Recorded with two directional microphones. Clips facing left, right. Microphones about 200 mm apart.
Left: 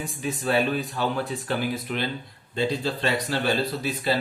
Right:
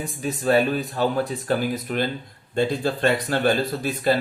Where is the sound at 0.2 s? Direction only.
40° right (ahead or behind).